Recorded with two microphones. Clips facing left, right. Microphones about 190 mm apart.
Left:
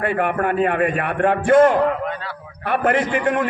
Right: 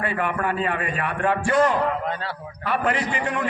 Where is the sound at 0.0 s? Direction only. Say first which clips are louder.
Left 5 dB; 55° left (ahead or behind).